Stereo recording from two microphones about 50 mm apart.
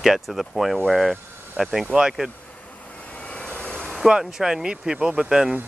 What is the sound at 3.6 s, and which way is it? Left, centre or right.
Vehicle, centre.